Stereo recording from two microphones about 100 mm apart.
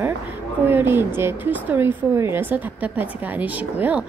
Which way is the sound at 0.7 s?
20° right (ahead or behind).